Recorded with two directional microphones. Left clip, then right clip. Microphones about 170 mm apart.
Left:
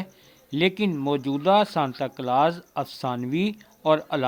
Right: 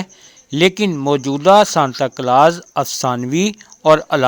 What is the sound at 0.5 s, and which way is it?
Speech, 40° right (ahead or behind).